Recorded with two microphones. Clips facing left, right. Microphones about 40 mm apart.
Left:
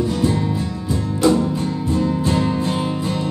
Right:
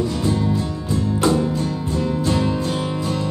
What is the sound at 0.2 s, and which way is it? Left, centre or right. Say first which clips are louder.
Music: left 1 dB; left.